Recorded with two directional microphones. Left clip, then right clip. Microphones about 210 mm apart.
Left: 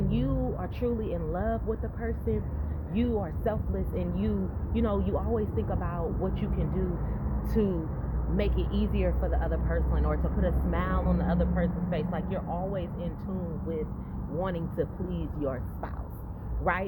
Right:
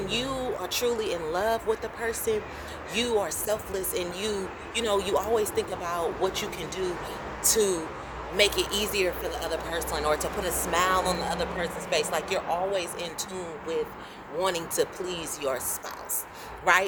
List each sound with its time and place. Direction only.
0.1 s speech: 25° right (ahead or behind)
14.3 s speech: 25° right (ahead or behind)